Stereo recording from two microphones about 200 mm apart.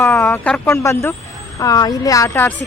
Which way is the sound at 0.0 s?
10° left (ahead or behind).